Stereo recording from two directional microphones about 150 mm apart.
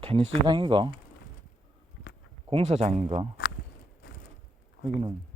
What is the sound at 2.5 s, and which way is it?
Speech, 45° right (ahead or behind).